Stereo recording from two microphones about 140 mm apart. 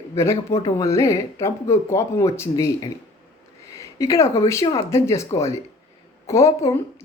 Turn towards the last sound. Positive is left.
turn(degrees=20)  # may be behind; listen again after turning